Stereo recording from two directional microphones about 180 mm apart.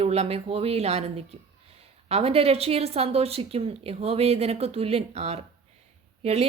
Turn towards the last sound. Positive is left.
turn(degrees=-35)  # may be behind; listen again after turning